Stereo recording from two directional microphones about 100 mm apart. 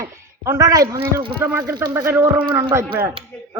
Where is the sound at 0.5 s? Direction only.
35° right (ahead or behind).